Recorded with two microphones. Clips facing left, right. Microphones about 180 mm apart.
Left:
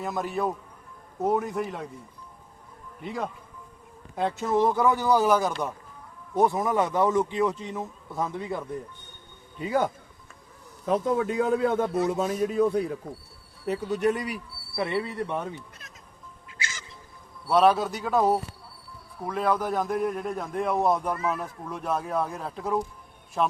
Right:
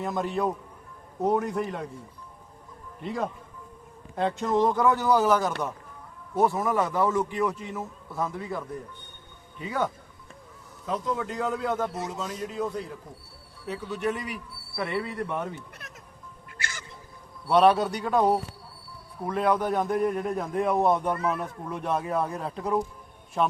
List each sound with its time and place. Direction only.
0.0 s a man's voice: centre (ahead or behind)
3.0 s a man's voice: centre (ahead or behind); by 9.8 s 35° left (ahead or behind)
10.8 s a man's voice: 55° left (ahead or behind)
13.7 s speech: 45° left (ahead or behind)
14.8 s a man's voice: 25° left (ahead or behind)
16.5 s music: 60° right (ahead or behind)
17.4 s a man's voice: centre (ahead or behind)